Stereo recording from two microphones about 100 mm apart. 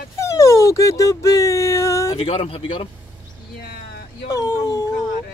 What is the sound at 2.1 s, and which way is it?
Speech, 75° left (ahead or behind).